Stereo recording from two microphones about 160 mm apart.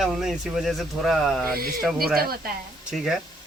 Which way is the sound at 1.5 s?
70° right (ahead or behind).